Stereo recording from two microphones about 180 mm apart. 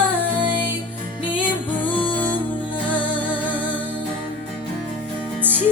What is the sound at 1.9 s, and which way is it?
Music, 10° left (ahead or behind).